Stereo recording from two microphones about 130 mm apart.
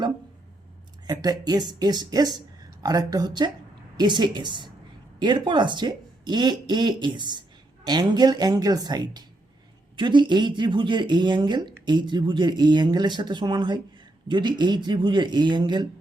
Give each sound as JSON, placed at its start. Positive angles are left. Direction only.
{"t": 1.0, "sound": "speech", "side_deg": -30}